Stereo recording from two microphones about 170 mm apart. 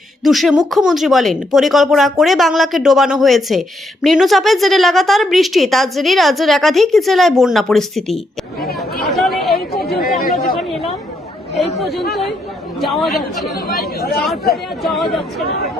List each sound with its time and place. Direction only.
0.2 s a woman's voice: centre (ahead or behind)
9.1 s chatter: centre (ahead or behind)
12.8 s a woman's voice: centre (ahead or behind)
13.7 s speech: 65° left (ahead or behind)
14.5 s a woman's voice: centre (ahead or behind)